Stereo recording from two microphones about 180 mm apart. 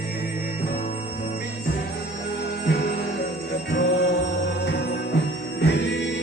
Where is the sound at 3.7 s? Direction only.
65° left (ahead or behind).